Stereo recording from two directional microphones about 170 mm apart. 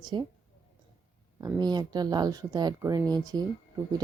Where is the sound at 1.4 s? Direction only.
25° right (ahead or behind).